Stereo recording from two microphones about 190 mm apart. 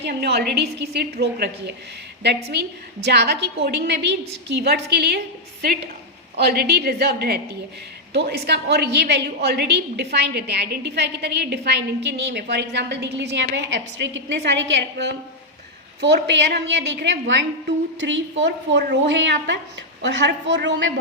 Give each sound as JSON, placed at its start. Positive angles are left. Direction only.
{"t": 0.0, "sound": "a woman's voice", "side_deg": -60}
{"t": 6.4, "sound": "a woman's voice", "side_deg": -55}